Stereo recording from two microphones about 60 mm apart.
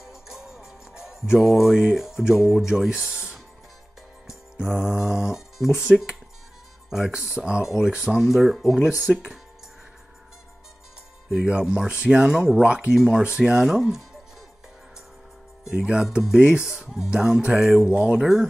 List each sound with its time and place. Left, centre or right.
0.0 s music: centre
0.9 s speech: centre
4.6 s speech: centre
7.3 s speech: centre
11.4 s speech: centre
15.7 s speech: centre